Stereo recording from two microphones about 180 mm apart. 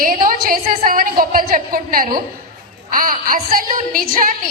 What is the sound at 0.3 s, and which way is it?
A woman's voice, 50° right (ahead or behind).